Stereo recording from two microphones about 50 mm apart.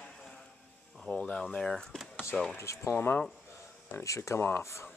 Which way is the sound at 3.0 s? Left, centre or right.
Left.